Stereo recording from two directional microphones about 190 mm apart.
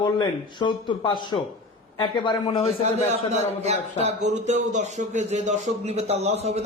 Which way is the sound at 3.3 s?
35° right (ahead or behind).